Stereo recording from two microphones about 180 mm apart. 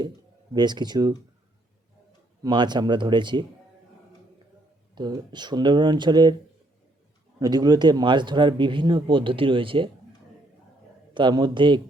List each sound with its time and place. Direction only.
0.5 s speech: 25° right (ahead or behind)
2.4 s speech: 25° right (ahead or behind)
4.9 s speech: 25° right (ahead or behind)
7.3 s speech: 20° right (ahead or behind)
11.1 s speech: 25° right (ahead or behind)